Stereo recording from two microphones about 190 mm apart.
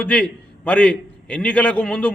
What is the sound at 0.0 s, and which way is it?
A man's voice, 5° left (ahead or behind).